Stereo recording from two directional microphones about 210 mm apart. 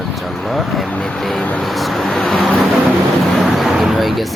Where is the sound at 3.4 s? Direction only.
Centre (ahead or behind).